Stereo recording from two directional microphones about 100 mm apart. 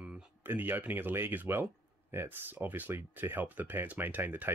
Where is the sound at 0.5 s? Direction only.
20° right (ahead or behind).